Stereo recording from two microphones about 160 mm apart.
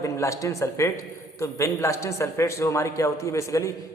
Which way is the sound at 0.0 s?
20° left (ahead or behind).